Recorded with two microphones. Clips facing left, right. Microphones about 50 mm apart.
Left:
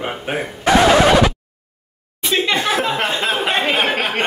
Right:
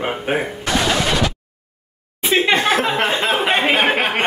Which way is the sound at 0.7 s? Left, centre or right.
Left.